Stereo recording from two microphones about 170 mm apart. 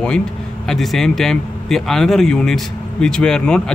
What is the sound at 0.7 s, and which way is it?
A man's voice, centre (ahead or behind).